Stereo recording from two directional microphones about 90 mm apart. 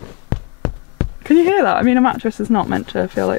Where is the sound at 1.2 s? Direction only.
20° left (ahead or behind).